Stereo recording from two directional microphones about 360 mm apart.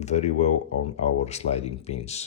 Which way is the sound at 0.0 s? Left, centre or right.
Centre.